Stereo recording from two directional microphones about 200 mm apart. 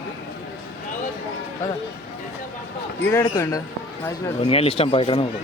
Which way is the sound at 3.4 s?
15° left (ahead or behind).